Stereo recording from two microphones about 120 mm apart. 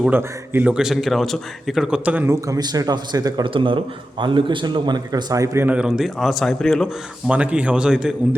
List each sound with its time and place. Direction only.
0.1 s a man's voice: 15° right (ahead or behind)
5.6 s a man's voice: 10° right (ahead or behind)
7.3 s a man's voice: 10° right (ahead or behind)